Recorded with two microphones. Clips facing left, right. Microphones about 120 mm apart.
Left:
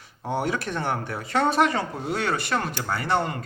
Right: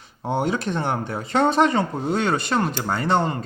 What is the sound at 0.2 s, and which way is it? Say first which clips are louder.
Speech: right 3 dB; 20° right (ahead or behind).